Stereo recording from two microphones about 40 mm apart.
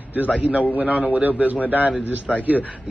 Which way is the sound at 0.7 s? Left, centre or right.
Right.